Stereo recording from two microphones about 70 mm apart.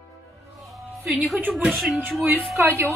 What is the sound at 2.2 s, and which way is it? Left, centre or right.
Speech, right.